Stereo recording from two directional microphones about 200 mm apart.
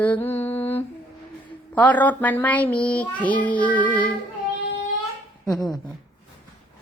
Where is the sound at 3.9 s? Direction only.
20° right (ahead or behind).